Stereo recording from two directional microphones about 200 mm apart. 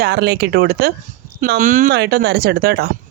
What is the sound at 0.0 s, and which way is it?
Speech, 55° right (ahead or behind).